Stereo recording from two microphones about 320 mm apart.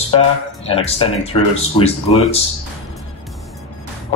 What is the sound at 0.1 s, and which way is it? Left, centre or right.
Speech, centre.